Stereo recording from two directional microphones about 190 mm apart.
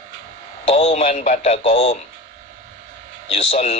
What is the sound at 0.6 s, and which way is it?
Speech, 35° left (ahead or behind).